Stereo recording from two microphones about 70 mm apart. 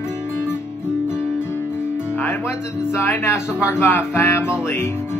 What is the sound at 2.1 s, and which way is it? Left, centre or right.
Music, left.